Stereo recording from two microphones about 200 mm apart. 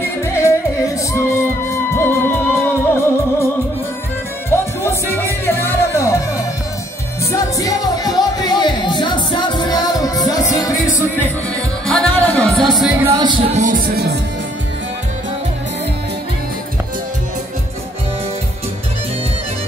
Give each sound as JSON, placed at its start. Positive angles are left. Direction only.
{"t": 0.0, "sound": "music", "side_deg": 15}
{"t": 4.5, "sound": "music", "side_deg": 10}
{"t": 7.5, "sound": "music", "side_deg": 20}
{"t": 12.5, "sound": "speech", "side_deg": 0}
{"t": 13.5, "sound": "music", "side_deg": -40}